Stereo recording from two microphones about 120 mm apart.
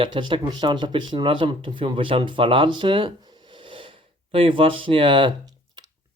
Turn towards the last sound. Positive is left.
turn(degrees=-40)  # may be behind; listen again after turning